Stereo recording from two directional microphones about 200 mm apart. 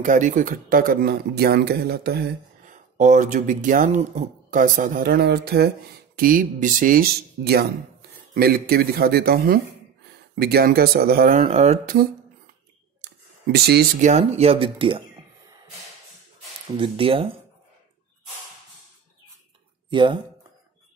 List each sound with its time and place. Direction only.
0.0 s speech: 40° right (ahead or behind)
11.3 s speech: 35° right (ahead or behind)
14.0 s speech: 35° right (ahead or behind)
16.7 s speech: 25° right (ahead or behind)
19.9 s speech: 25° right (ahead or behind)